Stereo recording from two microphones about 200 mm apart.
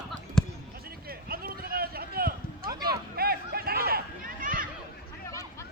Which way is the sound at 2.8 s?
50° right (ahead or behind).